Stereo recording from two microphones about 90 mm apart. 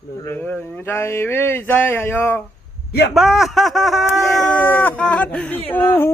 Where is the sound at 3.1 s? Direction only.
5° right (ahead or behind).